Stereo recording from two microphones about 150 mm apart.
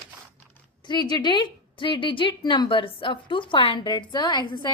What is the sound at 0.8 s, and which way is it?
A woman's voice, 30° left (ahead or behind).